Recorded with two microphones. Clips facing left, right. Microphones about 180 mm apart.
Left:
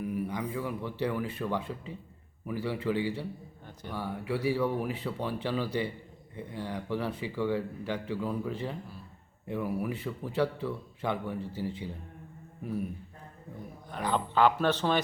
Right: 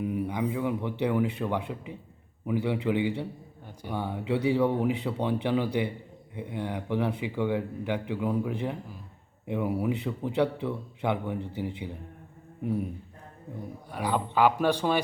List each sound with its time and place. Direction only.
0.0 s speech: 20° right (ahead or behind)
13.9 s speech: 10° right (ahead or behind)